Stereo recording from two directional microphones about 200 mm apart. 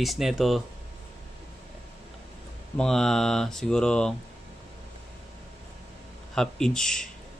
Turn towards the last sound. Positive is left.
turn(degrees=5)  # may be behind; listen again after turning